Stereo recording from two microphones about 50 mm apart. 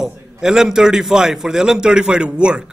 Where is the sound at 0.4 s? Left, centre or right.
Centre.